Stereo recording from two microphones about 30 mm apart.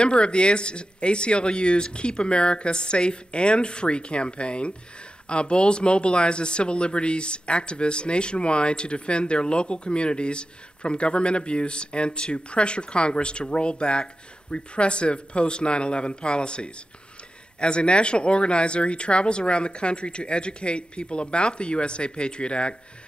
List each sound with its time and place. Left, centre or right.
0.0 s speech: left